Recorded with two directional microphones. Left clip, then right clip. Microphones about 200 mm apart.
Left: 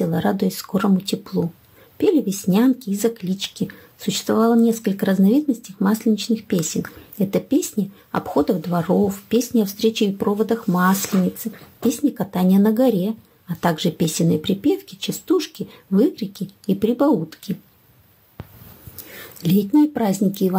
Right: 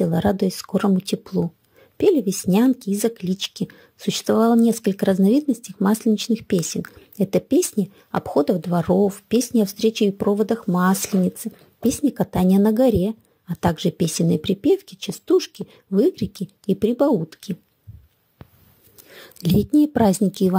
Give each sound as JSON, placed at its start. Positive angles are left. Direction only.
{"t": 0.0, "sound": "speech", "side_deg": -35}
{"t": 12.0, "sound": "speech", "side_deg": -35}
{"t": 19.4, "sound": "speech", "side_deg": -45}